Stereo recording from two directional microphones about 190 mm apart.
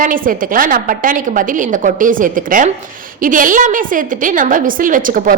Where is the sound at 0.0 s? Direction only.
45° right (ahead or behind).